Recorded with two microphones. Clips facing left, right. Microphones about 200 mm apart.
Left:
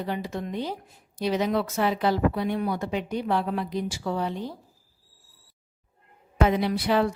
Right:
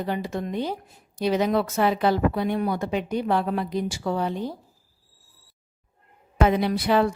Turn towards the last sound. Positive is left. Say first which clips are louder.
# right 2 dB
turn(degrees=-55)  # may be behind; listen again after turning